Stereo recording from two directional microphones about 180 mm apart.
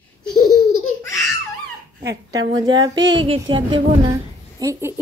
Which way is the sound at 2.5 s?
25° right (ahead or behind).